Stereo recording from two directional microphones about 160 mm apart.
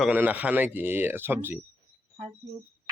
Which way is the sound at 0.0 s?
10° right (ahead or behind).